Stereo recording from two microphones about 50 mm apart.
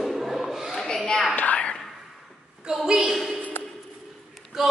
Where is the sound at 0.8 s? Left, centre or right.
Centre.